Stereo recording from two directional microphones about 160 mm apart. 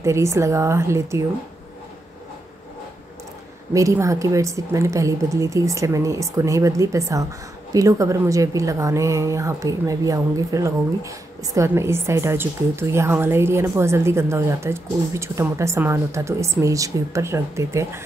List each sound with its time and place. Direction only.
0.0 s a woman's voice: 20° right (ahead or behind)
3.7 s a woman's voice: 20° right (ahead or behind)